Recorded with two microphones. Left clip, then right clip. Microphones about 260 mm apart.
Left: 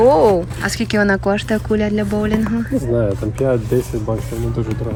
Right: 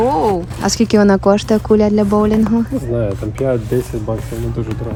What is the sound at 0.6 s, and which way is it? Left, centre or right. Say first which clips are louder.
Speech: right 4 dB; right.